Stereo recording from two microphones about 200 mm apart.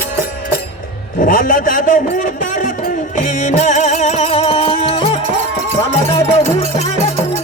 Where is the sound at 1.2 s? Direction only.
40° left (ahead or behind).